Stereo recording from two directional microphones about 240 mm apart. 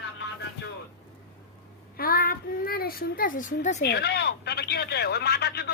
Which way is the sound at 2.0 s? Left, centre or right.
Left.